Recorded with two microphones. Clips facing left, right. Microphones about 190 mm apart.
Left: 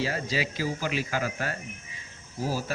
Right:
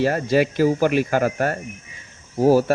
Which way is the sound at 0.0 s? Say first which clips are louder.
Right 11 dB; 55° right (ahead or behind).